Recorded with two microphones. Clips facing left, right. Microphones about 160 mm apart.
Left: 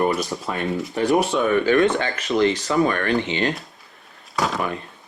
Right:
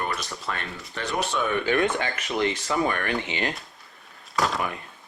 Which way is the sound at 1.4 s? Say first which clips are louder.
Left 6 dB; 40° left (ahead or behind).